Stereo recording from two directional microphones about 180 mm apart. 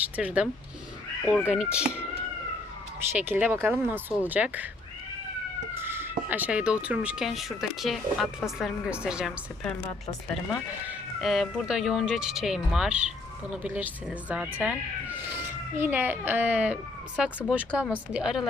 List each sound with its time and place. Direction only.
0.2 s speech: 5° right (ahead or behind)
1.5 s speech: 5° right (ahead or behind)
3.2 s speech: 10° right (ahead or behind)
5.7 s speech: 10° right (ahead or behind)
10.8 s speech: centre (ahead or behind)
15.8 s speech: 10° right (ahead or behind)